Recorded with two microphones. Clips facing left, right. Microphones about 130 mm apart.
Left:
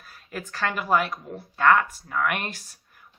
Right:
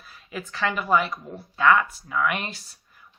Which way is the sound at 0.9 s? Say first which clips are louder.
Right 1 dB; 50° left (ahead or behind).